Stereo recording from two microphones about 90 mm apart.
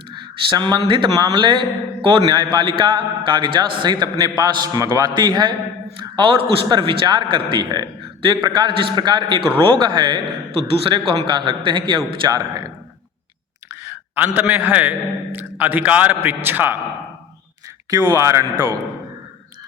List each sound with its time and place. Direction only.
0.1 s a sound: 60° right (ahead or behind)
0.9 s a man's voice: 60° right (ahead or behind)
2.2 s a man's voice: 50° right (ahead or behind)
4.8 s speech: 40° right (ahead or behind)
5.1 s a man's voice: 55° right (ahead or behind)
10.6 s a man's voice: 80° right
11.3 s a man's voice: 65° right (ahead or behind)
12.3 s a man's voice: 45° right (ahead or behind)
13.8 s a man's voice: 25° right (ahead or behind)
17.9 s a man's voice: 40° right (ahead or behind)